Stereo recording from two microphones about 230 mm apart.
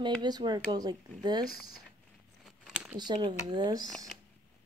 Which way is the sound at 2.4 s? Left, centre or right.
Centre.